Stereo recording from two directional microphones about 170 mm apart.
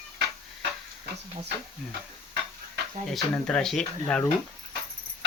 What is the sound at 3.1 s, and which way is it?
Speech, 5° left (ahead or behind).